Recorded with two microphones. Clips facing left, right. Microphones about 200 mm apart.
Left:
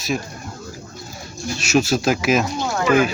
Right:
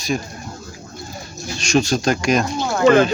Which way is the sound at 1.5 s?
5° left (ahead or behind).